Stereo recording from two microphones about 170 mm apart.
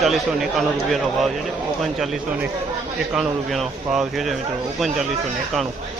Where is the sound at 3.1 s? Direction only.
Centre (ahead or behind).